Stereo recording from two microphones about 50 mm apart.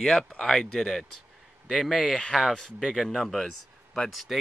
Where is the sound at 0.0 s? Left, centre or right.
Centre.